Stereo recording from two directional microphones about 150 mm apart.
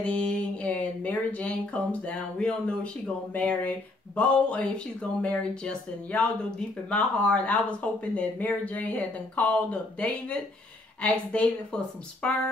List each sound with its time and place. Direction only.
0.0 s speech: 5° left (ahead or behind)